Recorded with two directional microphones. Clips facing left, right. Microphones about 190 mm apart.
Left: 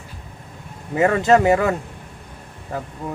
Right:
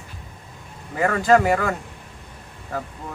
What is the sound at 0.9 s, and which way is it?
Speech, 25° left (ahead or behind).